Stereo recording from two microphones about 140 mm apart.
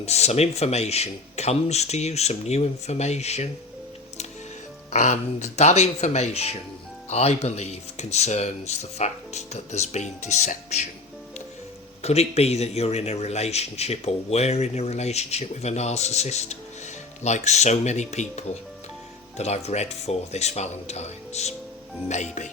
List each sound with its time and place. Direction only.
0.0 s speech: 50° left (ahead or behind)
4.9 s speech: 55° left (ahead or behind)
12.0 s speech: 50° left (ahead or behind)